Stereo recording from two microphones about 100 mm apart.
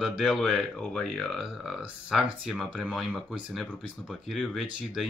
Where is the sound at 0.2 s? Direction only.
Centre (ahead or behind).